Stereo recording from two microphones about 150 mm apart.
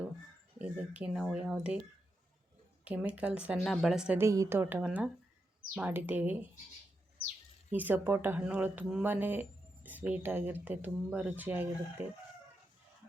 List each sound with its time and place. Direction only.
0.6 s speech: 10° right (ahead or behind)
2.8 s speech: 10° right (ahead or behind)
4.2 s speech: 20° right (ahead or behind)
7.7 s speech: 10° right (ahead or behind)